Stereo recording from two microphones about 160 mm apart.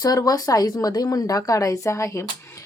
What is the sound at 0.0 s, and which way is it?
Speech, 25° left (ahead or behind).